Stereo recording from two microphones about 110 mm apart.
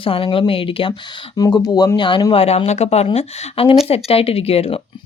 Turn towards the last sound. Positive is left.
turn(degrees=65)  # may be behind; listen again after turning